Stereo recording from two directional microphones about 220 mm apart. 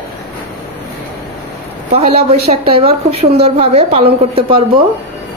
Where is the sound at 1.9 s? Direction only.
30° right (ahead or behind).